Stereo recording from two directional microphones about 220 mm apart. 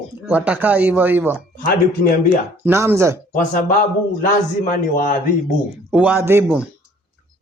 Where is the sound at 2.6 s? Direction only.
10° right (ahead or behind).